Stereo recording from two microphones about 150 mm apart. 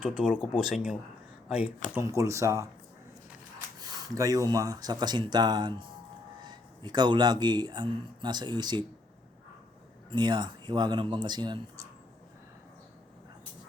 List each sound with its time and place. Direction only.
0.0 s speech: 5° right (ahead or behind)
2.0 s speech: 20° right (ahead or behind)
3.8 s a sound: 25° right (ahead or behind)
4.5 s speech: 25° right (ahead or behind)
10.1 s speech: 30° right (ahead or behind)